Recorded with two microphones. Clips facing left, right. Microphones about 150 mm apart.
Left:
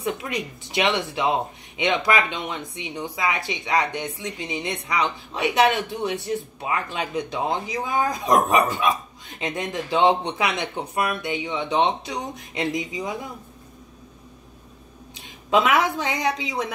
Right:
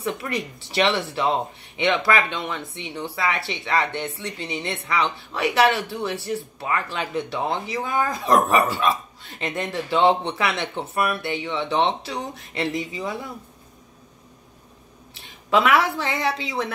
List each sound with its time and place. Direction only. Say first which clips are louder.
0.0 s speech: even; 20° left (ahead or behind)
15.1 s speech: even; 20° left (ahead or behind)